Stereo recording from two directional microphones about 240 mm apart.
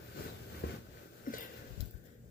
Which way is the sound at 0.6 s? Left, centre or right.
Left.